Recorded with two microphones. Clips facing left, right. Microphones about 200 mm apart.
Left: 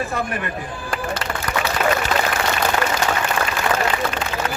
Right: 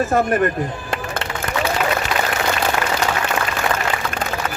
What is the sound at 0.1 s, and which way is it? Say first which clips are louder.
Speech: right 8 dB; 45° right (ahead or behind).